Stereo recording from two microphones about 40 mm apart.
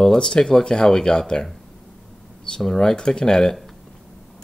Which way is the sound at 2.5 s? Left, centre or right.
Centre.